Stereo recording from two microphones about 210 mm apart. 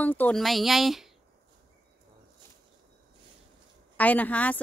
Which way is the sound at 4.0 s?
10° left (ahead or behind).